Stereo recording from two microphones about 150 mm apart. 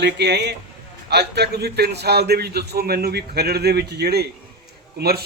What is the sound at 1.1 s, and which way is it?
A man's voice, 90° right.